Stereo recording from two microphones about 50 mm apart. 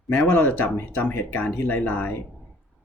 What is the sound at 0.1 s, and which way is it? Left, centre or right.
Speech, left.